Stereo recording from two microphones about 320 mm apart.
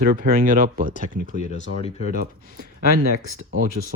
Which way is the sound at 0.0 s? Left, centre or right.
Right.